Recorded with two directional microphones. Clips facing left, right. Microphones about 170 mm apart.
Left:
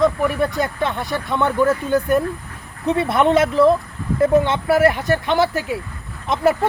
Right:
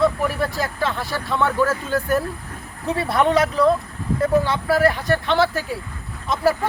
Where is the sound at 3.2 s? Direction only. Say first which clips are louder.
Left 4 dB; 25° left (ahead or behind).